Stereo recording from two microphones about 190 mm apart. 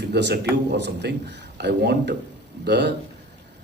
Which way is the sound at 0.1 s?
65° right (ahead or behind).